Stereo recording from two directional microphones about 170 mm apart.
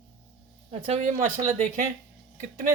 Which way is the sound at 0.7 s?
40° right (ahead or behind).